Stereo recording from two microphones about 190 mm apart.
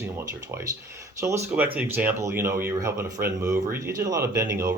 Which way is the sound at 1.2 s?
15° right (ahead or behind).